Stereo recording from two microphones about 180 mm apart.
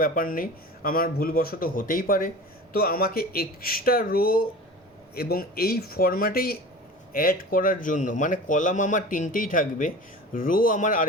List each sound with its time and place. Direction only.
0.0 s speech: 50° left (ahead or behind)